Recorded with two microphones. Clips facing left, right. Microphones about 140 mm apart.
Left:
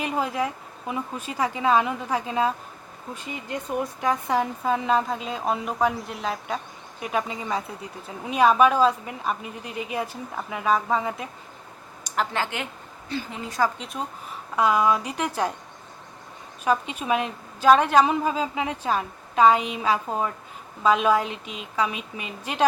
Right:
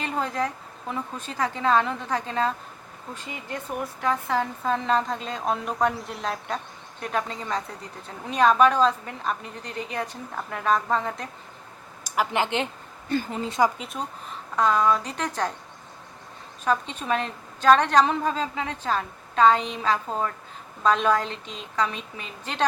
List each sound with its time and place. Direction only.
0.0 s speech: 10° left (ahead or behind)
4.0 s a woman's voice: 15° left (ahead or behind)
12.0 s speech: 10° right (ahead or behind)
13.1 s a woman's voice: 50° right (ahead or behind)
13.7 s a woman's voice: centre (ahead or behind)
14.5 s speech: 10° left (ahead or behind)
16.6 s speech: 10° left (ahead or behind)